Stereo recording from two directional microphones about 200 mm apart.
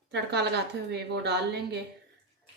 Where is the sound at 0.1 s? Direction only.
55° right (ahead or behind).